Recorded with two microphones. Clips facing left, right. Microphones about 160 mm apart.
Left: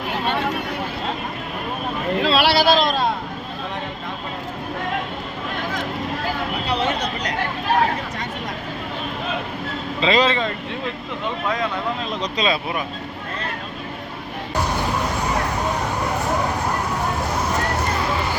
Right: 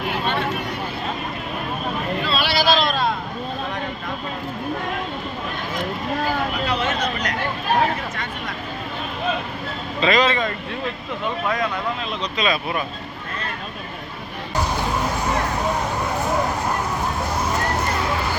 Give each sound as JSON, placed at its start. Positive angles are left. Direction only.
{"t": 2.2, "sound": "a sound", "side_deg": 85}
{"t": 2.7, "sound": "vehicle", "side_deg": 40}
{"t": 6.7, "sound": "vehicle", "side_deg": 30}
{"t": 10.0, "sound": "a man's voice", "side_deg": 25}
{"t": 12.2, "sound": "speech", "side_deg": 30}